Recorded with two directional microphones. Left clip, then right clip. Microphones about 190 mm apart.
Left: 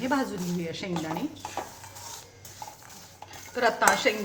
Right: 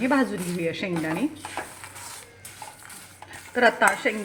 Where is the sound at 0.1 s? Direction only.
35° right (ahead or behind).